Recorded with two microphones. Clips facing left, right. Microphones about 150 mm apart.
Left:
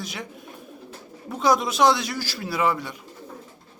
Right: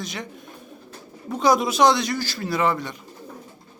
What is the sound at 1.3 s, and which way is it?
A man's voice, centre (ahead or behind).